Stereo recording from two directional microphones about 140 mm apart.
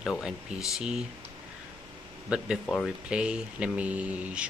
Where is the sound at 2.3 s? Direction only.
Centre (ahead or behind).